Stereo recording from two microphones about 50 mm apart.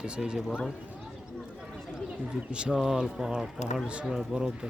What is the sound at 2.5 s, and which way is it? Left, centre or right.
Speech, centre.